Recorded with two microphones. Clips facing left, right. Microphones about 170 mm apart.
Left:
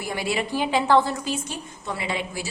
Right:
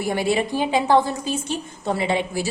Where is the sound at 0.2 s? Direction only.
25° right (ahead or behind).